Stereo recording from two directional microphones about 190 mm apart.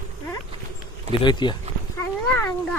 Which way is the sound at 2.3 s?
10° left (ahead or behind).